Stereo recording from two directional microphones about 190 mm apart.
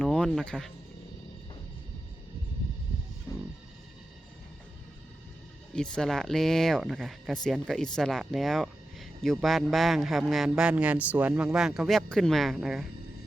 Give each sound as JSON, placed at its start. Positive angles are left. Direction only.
{"t": 0.0, "sound": "music", "side_deg": 5}
{"t": 3.3, "sound": "music", "side_deg": 15}
{"t": 5.7, "sound": "speech", "side_deg": 5}